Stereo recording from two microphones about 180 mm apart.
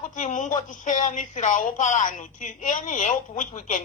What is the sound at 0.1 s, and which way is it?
Speech, 45° left (ahead or behind).